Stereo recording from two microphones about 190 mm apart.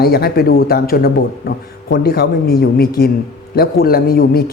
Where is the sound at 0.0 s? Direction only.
55° left (ahead or behind).